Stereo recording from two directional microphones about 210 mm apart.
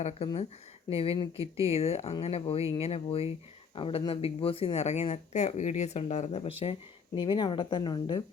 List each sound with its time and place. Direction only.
0.0 s speech: 30° left (ahead or behind)